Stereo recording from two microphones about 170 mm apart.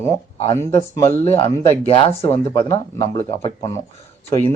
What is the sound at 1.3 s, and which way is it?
Speech, 35° left (ahead or behind).